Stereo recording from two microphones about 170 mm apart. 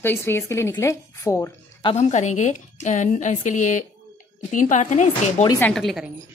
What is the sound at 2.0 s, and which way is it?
A woman's voice, 45° left (ahead or behind).